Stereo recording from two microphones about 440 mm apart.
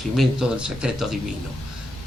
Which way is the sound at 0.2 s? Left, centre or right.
Centre.